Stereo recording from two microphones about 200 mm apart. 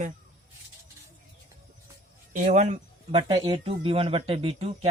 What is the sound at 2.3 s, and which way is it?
Speech, 35° right (ahead or behind).